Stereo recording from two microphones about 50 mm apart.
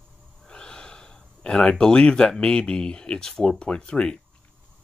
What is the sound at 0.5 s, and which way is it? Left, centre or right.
Speech, centre.